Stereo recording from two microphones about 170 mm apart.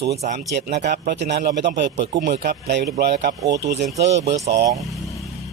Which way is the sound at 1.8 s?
90° right.